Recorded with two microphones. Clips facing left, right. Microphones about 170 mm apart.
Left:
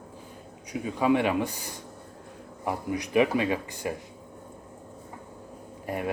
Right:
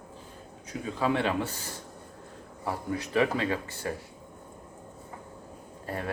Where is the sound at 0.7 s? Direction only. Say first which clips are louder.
Left 4 dB; 15° left (ahead or behind).